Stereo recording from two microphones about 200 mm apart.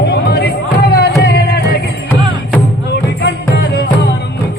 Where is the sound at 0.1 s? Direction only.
50° left (ahead or behind).